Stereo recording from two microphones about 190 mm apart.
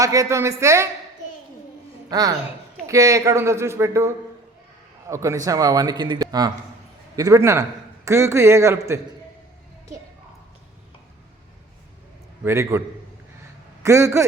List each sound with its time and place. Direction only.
0.0 s a man's voice: 15° right (ahead or behind)
2.0 s a man's voice: 20° right (ahead or behind)
12.5 s a man's voice: 15° right (ahead or behind)
13.8 s a man's voice: 15° right (ahead or behind)